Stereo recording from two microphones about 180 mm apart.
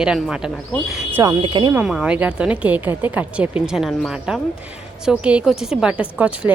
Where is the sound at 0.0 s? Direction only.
5° right (ahead or behind).